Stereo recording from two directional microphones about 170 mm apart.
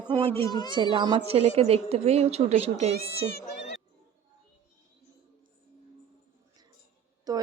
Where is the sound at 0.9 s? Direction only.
30° right (ahead or behind).